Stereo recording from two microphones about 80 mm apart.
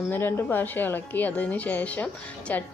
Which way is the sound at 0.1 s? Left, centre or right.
Left.